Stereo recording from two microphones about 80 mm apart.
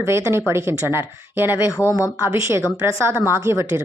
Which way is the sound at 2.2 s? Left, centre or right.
Right.